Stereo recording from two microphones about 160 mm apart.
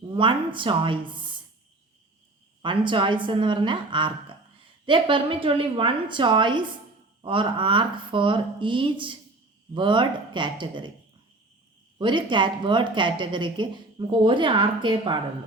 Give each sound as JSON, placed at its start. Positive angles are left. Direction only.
{"t": 0.1, "sound": "a woman's voice", "side_deg": -30}
{"t": 2.6, "sound": "a woman's voice", "side_deg": -30}
{"t": 11.9, "sound": "a woman's voice", "side_deg": -30}